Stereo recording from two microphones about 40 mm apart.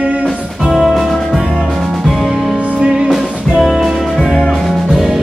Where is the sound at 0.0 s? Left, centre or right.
Right.